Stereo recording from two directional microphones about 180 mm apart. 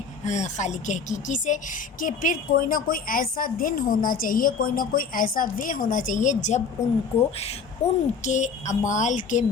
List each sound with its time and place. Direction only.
0.3 s a woman's voice: 40° left (ahead or behind)
7.8 s a woman's voice: 35° left (ahead or behind)